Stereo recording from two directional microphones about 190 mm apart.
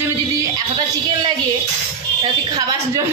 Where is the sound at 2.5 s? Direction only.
20° right (ahead or behind).